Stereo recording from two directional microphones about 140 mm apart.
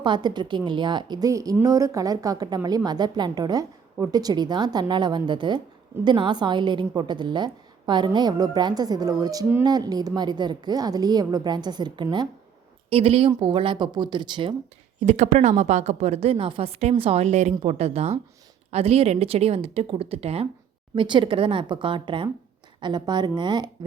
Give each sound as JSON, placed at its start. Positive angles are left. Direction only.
{"t": 0.0, "sound": "a woman's voice", "side_deg": -35}
{"t": 12.9, "sound": "a woman's voice", "side_deg": -40}
{"t": 15.0, "sound": "a woman's voice", "side_deg": -55}